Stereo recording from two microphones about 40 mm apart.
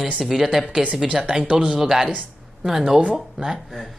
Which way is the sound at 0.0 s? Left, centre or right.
Centre.